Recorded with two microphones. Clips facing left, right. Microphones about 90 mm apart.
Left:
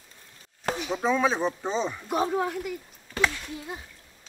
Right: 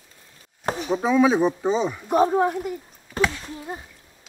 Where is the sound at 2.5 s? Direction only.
35° right (ahead or behind).